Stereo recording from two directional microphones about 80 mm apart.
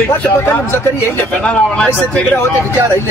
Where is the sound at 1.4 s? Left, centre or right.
Centre.